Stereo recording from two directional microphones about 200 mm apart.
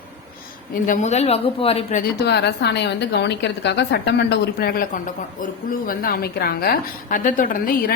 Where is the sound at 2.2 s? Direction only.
55° left (ahead or behind).